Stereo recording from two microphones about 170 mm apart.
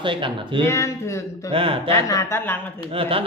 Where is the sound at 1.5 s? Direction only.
35° right (ahead or behind).